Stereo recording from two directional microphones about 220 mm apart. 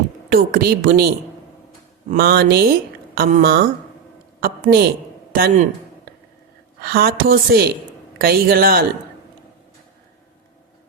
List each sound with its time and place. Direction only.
0.3 s a woman's voice: 40° right (ahead or behind)
6.8 s a woman's voice: 45° right (ahead or behind)